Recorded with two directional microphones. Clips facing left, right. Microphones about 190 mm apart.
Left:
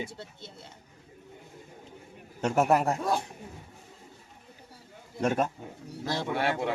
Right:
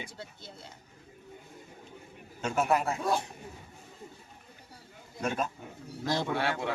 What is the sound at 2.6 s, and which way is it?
Speech, 40° left (ahead or behind).